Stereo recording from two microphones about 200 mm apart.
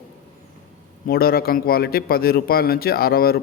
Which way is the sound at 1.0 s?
50° left (ahead or behind).